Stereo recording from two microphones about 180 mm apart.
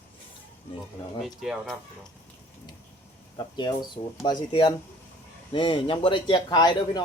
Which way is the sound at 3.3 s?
25° left (ahead or behind).